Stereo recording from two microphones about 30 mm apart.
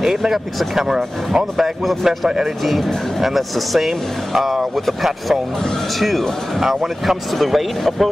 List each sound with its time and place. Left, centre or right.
0.0 s speech: centre
0.8 s speech: centre
2.4 s speech: centre